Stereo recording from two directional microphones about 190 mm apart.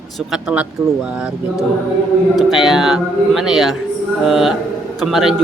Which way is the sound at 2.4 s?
Centre (ahead or behind).